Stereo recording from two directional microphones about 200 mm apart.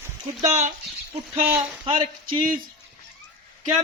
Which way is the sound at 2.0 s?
25° right (ahead or behind).